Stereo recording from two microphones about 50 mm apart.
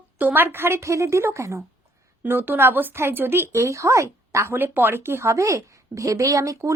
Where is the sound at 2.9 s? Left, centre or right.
Right.